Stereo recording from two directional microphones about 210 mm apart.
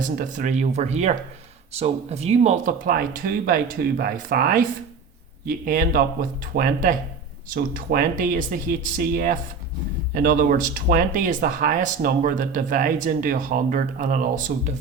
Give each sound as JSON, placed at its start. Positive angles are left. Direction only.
{"t": 0.0, "sound": "speech", "side_deg": -40}